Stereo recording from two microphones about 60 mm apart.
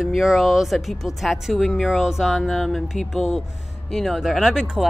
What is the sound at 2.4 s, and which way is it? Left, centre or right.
Speech, centre.